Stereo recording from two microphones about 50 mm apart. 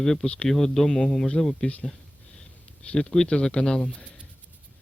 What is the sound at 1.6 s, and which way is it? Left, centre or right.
Speech, left.